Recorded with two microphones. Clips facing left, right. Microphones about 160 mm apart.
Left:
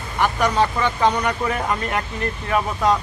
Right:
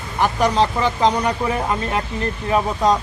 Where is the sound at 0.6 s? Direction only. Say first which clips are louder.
Even; 20° right (ahead or behind).